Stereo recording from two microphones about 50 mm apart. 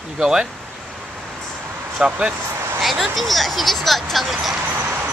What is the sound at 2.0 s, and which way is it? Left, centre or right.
Speech, centre.